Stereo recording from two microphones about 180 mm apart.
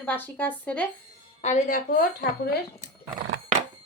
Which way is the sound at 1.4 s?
40° left (ahead or behind).